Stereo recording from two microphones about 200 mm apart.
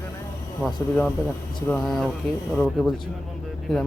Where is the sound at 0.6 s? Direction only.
5° left (ahead or behind).